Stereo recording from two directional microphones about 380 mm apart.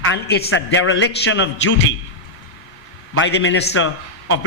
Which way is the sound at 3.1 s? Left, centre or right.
Left.